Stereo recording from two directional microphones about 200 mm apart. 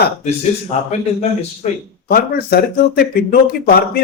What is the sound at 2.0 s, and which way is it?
Speech, 50° left (ahead or behind).